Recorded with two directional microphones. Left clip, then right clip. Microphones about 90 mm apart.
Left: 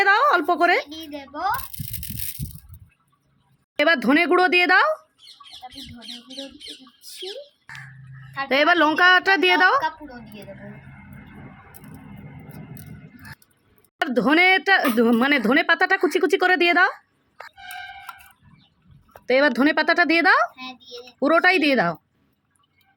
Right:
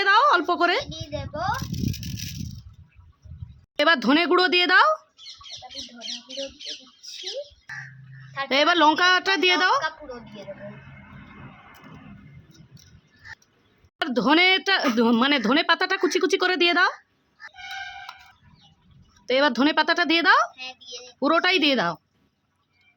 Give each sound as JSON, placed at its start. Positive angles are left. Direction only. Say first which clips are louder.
{"t": 0.0, "sound": "a sound", "louder": "left 1 dB", "side_deg": 20}
{"t": 0.9, "sound": "a woman's voice", "louder": "right 1 dB", "side_deg": -25}
{"t": 1.5, "sound": "rattle", "louder": "even", "side_deg": 50}
{"t": 3.8, "sound": "speech", "louder": "left 1 dB", "side_deg": 15}
{"t": 8.4, "sound": "speech", "louder": "left 1 dB", "side_deg": 20}
{"t": 14.1, "sound": "speech", "louder": "left 2 dB", "side_deg": 15}
{"t": 19.2, "sound": "speech", "louder": "left 2 dB", "side_deg": 25}